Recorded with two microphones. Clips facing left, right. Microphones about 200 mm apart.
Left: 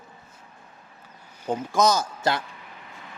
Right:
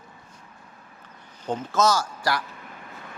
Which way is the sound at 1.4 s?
10° left (ahead or behind).